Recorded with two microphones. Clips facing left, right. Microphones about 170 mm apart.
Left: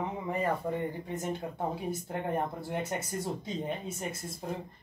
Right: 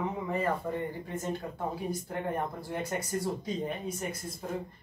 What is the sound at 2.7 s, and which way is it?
Speech, 25° left (ahead or behind).